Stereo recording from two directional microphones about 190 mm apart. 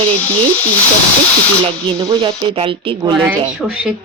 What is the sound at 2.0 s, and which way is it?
Speech, 25° right (ahead or behind).